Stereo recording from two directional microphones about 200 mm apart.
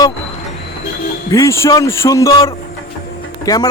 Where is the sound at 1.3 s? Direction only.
15° left (ahead or behind).